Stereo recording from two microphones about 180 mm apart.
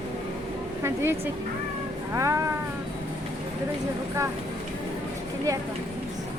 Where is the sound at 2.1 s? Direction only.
15° right (ahead or behind).